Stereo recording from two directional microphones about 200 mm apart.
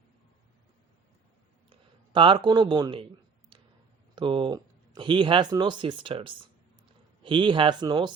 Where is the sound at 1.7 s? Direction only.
25° right (ahead or behind).